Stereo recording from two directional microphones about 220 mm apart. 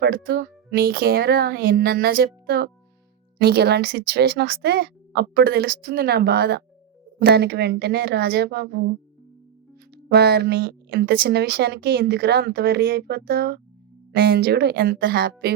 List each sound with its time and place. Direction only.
0.0 s speech: 45° right (ahead or behind)
10.1 s speech: 50° right (ahead or behind)